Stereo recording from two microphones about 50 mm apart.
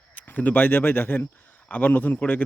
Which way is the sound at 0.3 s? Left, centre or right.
Left.